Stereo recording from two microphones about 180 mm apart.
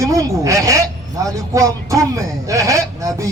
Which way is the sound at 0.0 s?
20° right (ahead or behind).